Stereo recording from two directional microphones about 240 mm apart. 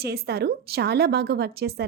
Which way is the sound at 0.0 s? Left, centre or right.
Right.